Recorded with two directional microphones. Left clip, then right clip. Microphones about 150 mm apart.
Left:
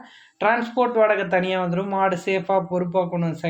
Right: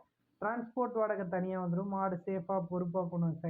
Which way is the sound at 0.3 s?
25° left (ahead or behind).